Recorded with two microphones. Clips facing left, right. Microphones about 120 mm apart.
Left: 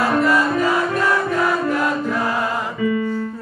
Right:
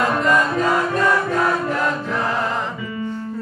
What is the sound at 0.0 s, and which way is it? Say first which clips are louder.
Music: left 1 dB; 5° left (ahead or behind).